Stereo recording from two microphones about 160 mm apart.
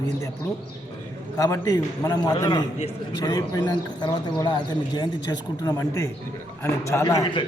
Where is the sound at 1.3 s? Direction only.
20° left (ahead or behind).